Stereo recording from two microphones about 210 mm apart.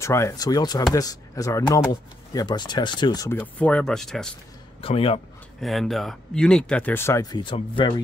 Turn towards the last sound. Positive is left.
turn(degrees=25)  # may be behind; listen again after turning